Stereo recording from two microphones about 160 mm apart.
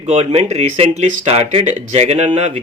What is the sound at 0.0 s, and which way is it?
Speech, 45° right (ahead or behind).